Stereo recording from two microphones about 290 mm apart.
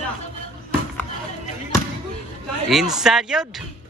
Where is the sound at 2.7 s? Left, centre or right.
Centre.